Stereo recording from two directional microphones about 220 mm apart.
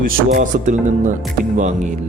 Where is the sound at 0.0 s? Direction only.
35° right (ahead or behind).